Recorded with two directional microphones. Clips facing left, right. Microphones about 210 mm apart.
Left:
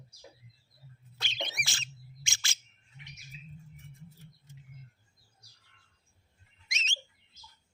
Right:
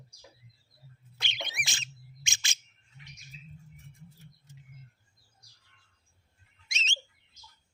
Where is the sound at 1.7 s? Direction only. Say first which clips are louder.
Right 1 dB; 15° right (ahead or behind).